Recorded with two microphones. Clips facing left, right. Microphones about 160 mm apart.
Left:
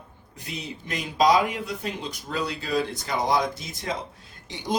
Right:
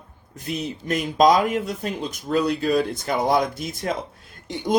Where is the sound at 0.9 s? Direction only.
50° right (ahead or behind).